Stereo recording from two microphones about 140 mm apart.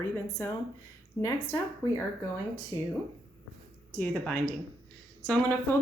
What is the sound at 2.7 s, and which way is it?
Speech, 25° left (ahead or behind).